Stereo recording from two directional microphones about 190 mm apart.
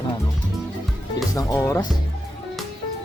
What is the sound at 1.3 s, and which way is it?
Speech, 20° left (ahead or behind).